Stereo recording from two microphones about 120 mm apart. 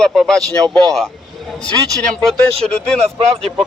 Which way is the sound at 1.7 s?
30° right (ahead or behind).